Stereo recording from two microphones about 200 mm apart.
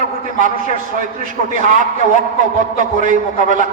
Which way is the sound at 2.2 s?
40° right (ahead or behind).